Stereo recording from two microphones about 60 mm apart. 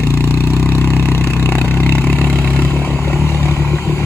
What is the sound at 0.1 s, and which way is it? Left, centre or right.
Vehicle, left.